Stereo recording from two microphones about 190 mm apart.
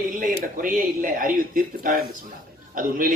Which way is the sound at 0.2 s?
45° right (ahead or behind).